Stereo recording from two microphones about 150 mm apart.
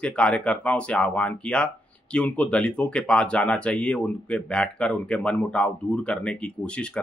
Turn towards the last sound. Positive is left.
turn(degrees=10)  # may be behind; listen again after turning